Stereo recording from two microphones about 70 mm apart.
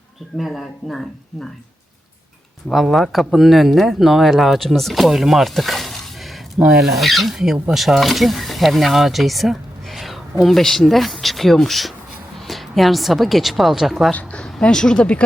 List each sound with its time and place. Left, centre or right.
0.3 s speech: centre
2.6 s speech: centre
14.1 s a sound: left
14.4 s speech: centre